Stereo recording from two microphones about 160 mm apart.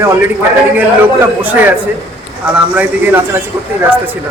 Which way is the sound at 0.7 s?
10° right (ahead or behind).